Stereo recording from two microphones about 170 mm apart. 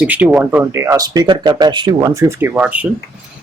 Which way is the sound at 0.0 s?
10° right (ahead or behind).